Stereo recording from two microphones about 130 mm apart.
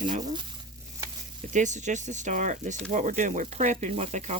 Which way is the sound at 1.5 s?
70° right (ahead or behind).